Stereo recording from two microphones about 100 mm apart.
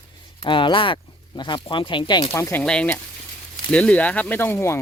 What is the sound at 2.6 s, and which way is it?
Speech, 10° left (ahead or behind).